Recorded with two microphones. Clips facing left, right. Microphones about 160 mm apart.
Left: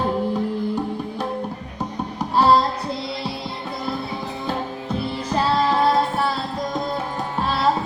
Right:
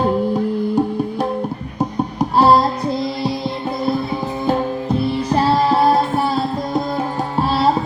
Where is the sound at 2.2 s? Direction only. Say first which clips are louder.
Right 4 dB; 40° right (ahead or behind).